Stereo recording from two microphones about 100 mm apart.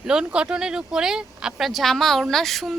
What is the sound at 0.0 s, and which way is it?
A woman's voice, 10° right (ahead or behind).